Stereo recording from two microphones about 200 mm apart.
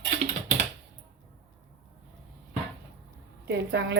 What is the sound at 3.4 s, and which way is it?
Speech, 60° right (ahead or behind).